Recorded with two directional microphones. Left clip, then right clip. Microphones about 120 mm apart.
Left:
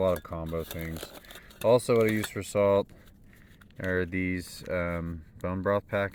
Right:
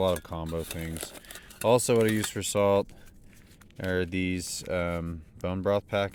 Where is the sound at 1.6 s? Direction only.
40° right (ahead or behind).